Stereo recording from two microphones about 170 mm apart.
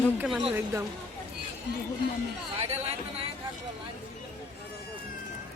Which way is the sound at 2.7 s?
35° right (ahead or behind).